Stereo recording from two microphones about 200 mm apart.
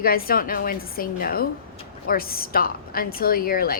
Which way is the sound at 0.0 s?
50° left (ahead or behind).